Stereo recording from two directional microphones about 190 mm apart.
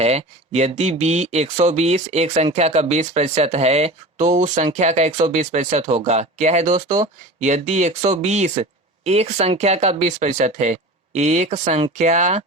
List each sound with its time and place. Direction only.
0.0 s speech: 35° right (ahead or behind)